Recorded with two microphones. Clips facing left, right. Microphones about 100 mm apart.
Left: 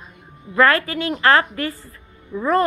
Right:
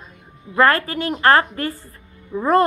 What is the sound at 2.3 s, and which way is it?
Speech, 25° right (ahead or behind).